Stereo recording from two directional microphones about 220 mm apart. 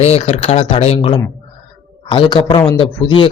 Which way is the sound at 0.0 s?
25° left (ahead or behind).